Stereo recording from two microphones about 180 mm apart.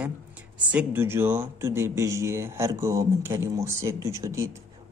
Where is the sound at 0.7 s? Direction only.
10° right (ahead or behind).